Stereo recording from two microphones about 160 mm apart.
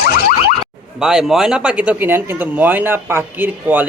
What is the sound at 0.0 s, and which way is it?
Boing, 70° left (ahead or behind).